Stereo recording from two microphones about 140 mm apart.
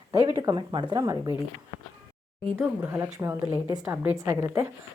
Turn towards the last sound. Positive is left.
turn(degrees=-20)  # may be behind; listen again after turning